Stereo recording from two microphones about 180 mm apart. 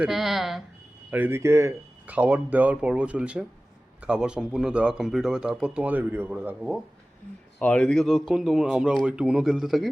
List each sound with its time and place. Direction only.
0.0 s speech: centre (ahead or behind)
1.1 s speech: 10° right (ahead or behind)